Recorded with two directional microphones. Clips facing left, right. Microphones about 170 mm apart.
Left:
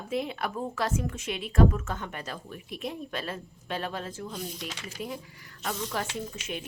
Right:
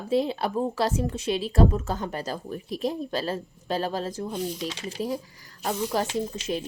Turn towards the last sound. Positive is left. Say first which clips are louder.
# right 7 dB
turn(degrees=-35)  # may be behind; listen again after turning